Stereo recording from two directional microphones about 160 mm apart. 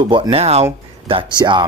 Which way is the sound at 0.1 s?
40° right (ahead or behind).